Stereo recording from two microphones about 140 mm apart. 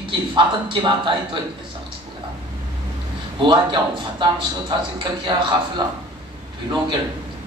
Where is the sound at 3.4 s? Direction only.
35° right (ahead or behind).